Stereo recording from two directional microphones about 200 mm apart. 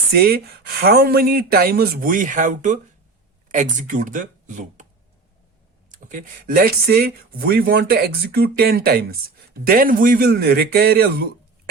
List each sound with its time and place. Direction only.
0.1 s speech: 50° right (ahead or behind)
5.9 s speech: 40° right (ahead or behind)